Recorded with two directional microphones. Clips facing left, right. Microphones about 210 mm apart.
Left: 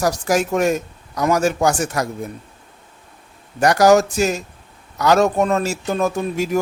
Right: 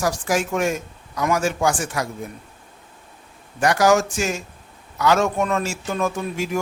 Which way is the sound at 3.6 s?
40° left (ahead or behind).